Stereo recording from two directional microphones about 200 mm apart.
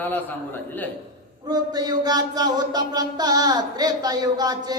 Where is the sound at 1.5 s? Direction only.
20° right (ahead or behind).